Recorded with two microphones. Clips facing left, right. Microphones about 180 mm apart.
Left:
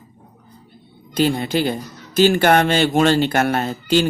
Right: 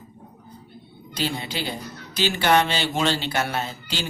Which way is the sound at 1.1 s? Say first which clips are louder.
Left 10 dB; 50° left (ahead or behind).